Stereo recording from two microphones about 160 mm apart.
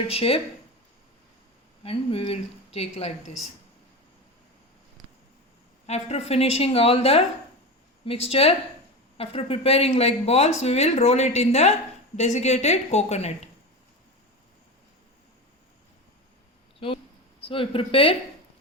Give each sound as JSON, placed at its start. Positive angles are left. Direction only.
{"t": 0.1, "sound": "speech", "side_deg": 35}
{"t": 1.8, "sound": "speech", "side_deg": 35}
{"t": 5.8, "sound": "a woman's voice", "side_deg": 40}
{"t": 17.4, "sound": "speech", "side_deg": 35}